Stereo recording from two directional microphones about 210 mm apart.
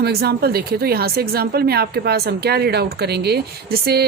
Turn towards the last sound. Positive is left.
turn(degrees=-50)  # may be behind; listen again after turning